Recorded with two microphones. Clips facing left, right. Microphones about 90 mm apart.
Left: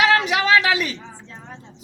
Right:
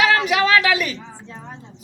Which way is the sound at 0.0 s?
20° left (ahead or behind).